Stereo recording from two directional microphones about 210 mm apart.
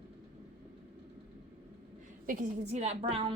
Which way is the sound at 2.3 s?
35° right (ahead or behind).